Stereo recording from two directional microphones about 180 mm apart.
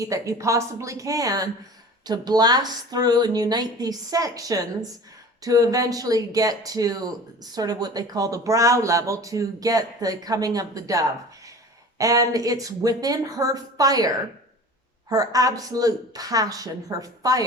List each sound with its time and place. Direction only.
0.0 s a woman's voice: 20° right (ahead or behind)
15.1 s speech: 20° right (ahead or behind)